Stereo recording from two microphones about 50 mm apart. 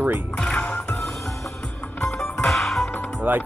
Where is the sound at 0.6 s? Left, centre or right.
Left.